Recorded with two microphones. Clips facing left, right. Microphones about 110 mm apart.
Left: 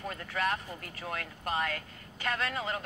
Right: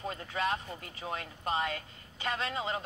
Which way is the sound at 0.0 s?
25° right (ahead or behind).